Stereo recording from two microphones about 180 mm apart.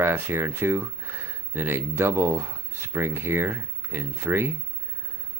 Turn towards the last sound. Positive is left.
turn(degrees=-10)  # may be behind; listen again after turning